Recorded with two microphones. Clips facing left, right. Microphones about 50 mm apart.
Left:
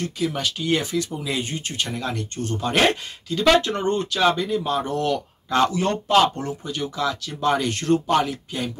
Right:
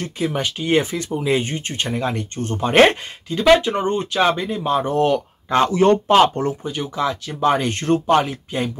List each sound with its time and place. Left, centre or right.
0.0 s speech: right
3.3 s speech: centre